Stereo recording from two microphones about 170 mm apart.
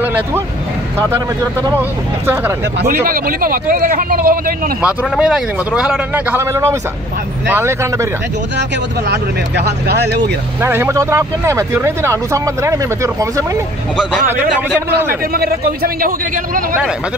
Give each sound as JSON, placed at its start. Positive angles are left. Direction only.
{"t": 0.0, "sound": "vehicle", "side_deg": -10}
{"t": 0.9, "sound": "speech", "side_deg": -15}
{"t": 2.8, "sound": "speech", "side_deg": -60}
{"t": 4.8, "sound": "speech", "side_deg": -5}
{"t": 9.1, "sound": "speech", "side_deg": -80}
{"t": 10.6, "sound": "speech", "side_deg": -15}
{"t": 13.9, "sound": "a man's voice", "side_deg": -5}
{"t": 15.3, "sound": "speech", "side_deg": -65}